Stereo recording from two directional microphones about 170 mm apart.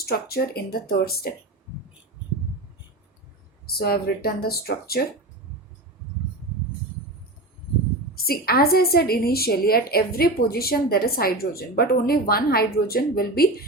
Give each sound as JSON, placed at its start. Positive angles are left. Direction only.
{"t": 0.0, "sound": "a woman's voice", "side_deg": 65}
{"t": 3.8, "sound": "a woman's voice", "side_deg": 65}
{"t": 8.3, "sound": "a woman's voice", "side_deg": 65}